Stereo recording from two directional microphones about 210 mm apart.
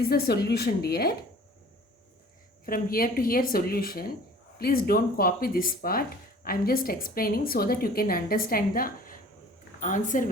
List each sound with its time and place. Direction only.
0.1 s speech: 50° left (ahead or behind)
2.6 s speech: 45° left (ahead or behind)